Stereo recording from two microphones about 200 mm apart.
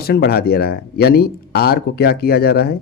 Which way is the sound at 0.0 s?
50° left (ahead or behind).